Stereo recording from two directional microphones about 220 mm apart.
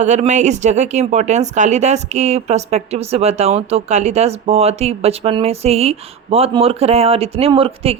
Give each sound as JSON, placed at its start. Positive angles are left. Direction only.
{"t": 0.0, "sound": "speech", "side_deg": -30}